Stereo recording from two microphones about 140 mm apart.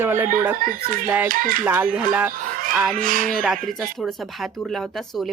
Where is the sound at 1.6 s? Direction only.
10° right (ahead or behind).